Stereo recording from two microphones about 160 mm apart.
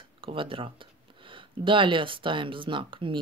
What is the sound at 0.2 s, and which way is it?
Speech, 35° right (ahead or behind).